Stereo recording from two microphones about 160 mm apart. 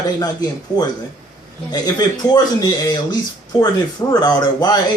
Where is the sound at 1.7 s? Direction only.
25° left (ahead or behind).